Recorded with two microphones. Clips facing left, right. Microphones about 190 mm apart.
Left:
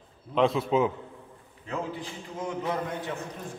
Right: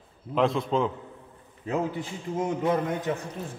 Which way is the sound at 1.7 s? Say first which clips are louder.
Right 5 dB; 25° right (ahead or behind).